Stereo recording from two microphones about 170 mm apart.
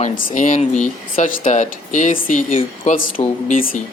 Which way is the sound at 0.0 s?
45° left (ahead or behind).